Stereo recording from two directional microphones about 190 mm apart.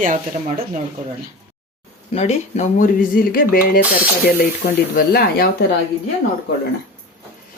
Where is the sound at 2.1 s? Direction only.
35° left (ahead or behind).